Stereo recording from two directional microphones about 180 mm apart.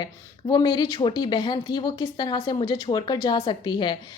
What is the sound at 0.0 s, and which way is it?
A woman's voice, 25° left (ahead or behind).